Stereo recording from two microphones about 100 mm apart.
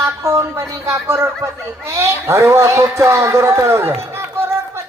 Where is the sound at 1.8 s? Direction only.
30° right (ahead or behind).